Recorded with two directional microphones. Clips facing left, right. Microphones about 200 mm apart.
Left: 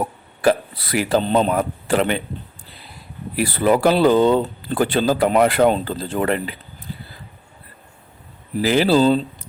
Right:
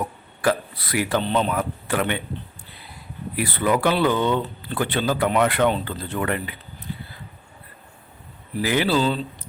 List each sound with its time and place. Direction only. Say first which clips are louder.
0.0 s speech: left 5 dB; 30° left (ahead or behind)
3.4 s speech: left 5 dB; 30° left (ahead or behind)
8.6 s speech: left 6 dB; 30° left (ahead or behind)